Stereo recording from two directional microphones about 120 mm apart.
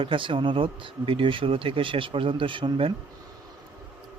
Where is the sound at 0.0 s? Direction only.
45° right (ahead or behind).